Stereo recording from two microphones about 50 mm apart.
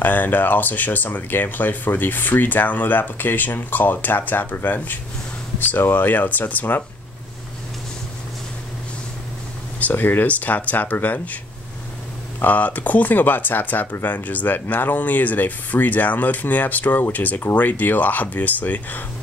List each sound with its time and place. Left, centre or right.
0.0 s speech: left
9.8 s a sound: left
10.0 s speech: left
12.4 s speech: left